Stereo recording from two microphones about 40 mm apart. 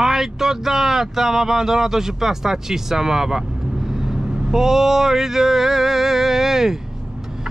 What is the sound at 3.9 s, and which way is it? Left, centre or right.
Vehicle, centre.